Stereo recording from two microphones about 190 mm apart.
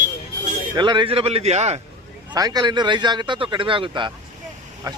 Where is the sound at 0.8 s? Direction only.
25° right (ahead or behind).